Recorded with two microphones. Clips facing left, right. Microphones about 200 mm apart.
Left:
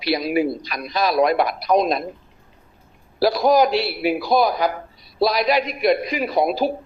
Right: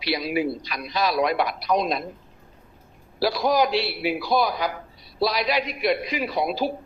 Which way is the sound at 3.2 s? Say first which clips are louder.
Left 5 dB; 45° left (ahead or behind).